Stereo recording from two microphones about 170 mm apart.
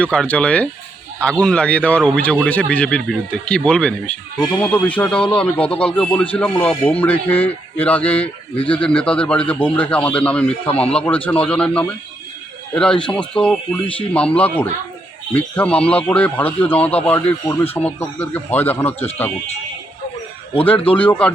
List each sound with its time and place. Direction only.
0.0 s speech: 5° left (ahead or behind)
20.9 s speech: 10° left (ahead or behind)